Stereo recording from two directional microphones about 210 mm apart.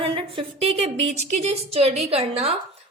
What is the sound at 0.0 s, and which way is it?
A woman's voice, 25° right (ahead or behind).